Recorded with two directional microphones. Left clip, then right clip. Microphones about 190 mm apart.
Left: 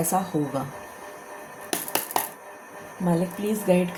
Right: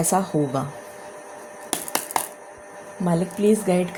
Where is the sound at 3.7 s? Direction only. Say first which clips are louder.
Even; 50° right (ahead or behind).